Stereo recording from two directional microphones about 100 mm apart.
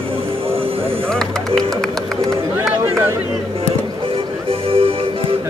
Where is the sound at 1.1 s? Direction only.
5° left (ahead or behind).